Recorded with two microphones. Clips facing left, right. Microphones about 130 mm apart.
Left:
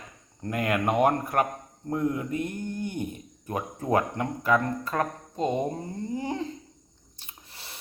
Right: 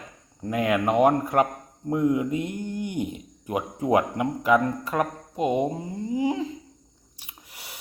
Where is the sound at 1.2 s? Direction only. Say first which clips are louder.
Right 4 dB; 20° right (ahead or behind).